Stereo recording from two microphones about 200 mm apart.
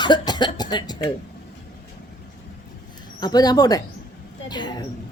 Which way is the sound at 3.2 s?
20° left (ahead or behind).